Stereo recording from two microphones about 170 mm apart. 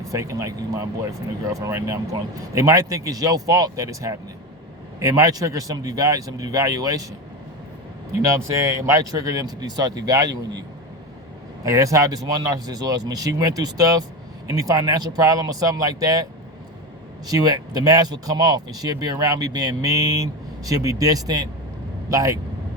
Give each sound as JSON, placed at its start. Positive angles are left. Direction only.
{"t": 0.1, "sound": "speech", "side_deg": -20}
{"t": 8.3, "sound": "speech", "side_deg": -20}
{"t": 11.6, "sound": "speech", "side_deg": -20}
{"t": 17.2, "sound": "speech", "side_deg": -20}